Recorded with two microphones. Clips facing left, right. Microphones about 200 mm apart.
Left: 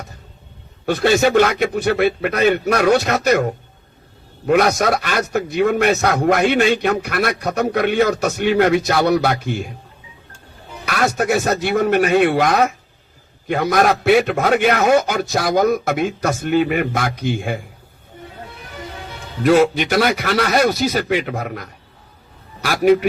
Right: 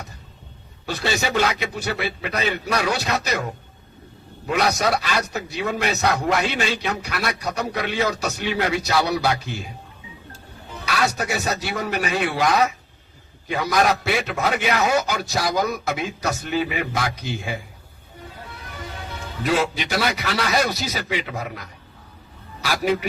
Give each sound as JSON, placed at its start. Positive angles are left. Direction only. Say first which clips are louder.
{"t": 0.9, "sound": "a man's voice", "louder": "left 10 dB", "side_deg": 55}
{"t": 10.8, "sound": "a man's voice", "louder": "left 5 dB", "side_deg": 55}
{"t": 19.4, "sound": "a man's voice", "louder": "left 9 dB", "side_deg": 50}